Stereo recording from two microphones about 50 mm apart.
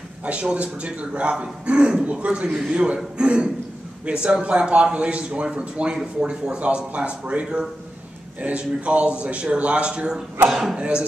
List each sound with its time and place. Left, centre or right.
0.2 s a man's voice: right
3.2 s cough: centre
4.0 s a man's voice: right
10.5 s a man's voice: centre
10.8 s a man's voice: right